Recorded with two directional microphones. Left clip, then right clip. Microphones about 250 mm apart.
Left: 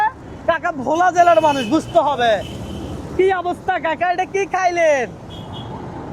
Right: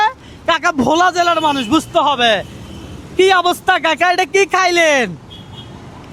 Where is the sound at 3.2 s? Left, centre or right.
Right.